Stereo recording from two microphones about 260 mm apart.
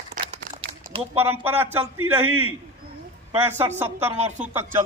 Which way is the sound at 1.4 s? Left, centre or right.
Centre.